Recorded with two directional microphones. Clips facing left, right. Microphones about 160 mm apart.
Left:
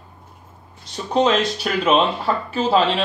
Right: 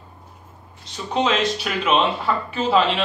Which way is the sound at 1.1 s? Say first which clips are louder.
Left 3 dB; 40° left (ahead or behind).